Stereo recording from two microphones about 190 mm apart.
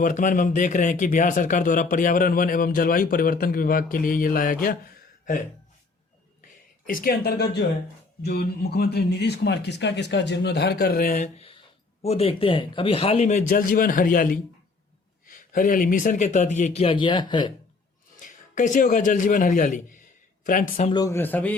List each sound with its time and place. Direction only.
0.0 s speech: 45° left (ahead or behind)
6.8 s speech: 50° left (ahead or behind)
12.0 s a man's voice: 30° left (ahead or behind)
18.2 s a man's voice: 40° left (ahead or behind)
20.9 s speech: 15° left (ahead or behind)